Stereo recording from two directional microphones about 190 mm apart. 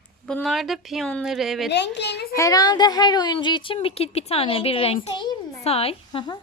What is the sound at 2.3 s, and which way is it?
A woman's voice, 20° left (ahead or behind).